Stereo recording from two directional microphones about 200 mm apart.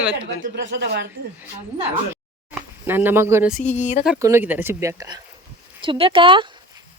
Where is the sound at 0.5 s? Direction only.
60° right (ahead or behind).